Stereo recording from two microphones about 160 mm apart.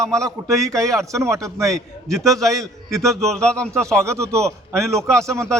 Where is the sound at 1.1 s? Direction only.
20° right (ahead or behind).